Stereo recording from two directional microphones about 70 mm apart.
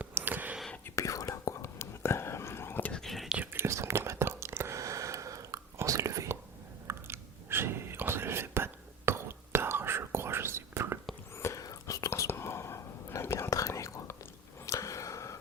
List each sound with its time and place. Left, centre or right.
0.1 s whispering: right
0.9 s whispering: left
3.0 s whispering: centre
3.2 s whispering: centre
3.5 s whispering: right
4.8 s a sound: right
5.7 s whispering: right
6.8 s whispering: right
11.3 s whispering: left
11.6 s whispering: left
12.3 s whispering: left
14.7 s a sound: left